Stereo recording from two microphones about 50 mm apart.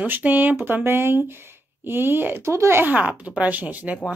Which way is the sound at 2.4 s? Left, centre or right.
Right.